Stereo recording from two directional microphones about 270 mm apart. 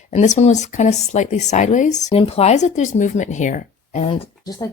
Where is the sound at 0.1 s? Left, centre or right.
Left.